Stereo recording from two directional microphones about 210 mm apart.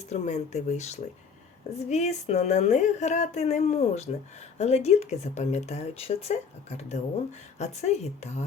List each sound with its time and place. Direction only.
0.1 s speech: 30° left (ahead or behind)